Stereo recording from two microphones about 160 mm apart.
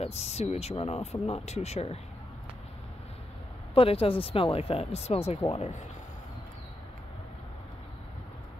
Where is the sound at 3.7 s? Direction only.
35° left (ahead or behind).